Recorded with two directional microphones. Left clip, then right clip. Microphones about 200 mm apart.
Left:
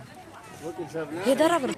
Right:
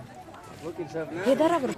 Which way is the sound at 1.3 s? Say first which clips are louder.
Left 1 dB; 5° left (ahead or behind).